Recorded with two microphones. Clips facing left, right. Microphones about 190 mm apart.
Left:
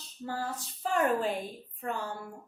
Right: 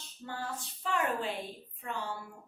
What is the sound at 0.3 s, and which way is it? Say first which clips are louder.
A woman's voice: left 4 dB; 40° left (ahead or behind).